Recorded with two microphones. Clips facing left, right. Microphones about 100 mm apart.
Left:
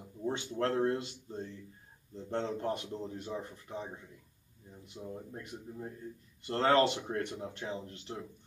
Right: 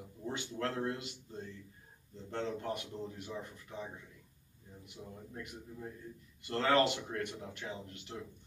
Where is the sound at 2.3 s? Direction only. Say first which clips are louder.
Left 3 dB; 30° left (ahead or behind).